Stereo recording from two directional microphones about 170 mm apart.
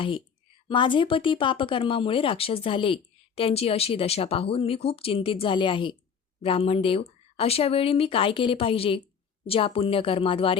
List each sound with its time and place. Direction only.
0.7 s speech: 30° left (ahead or behind)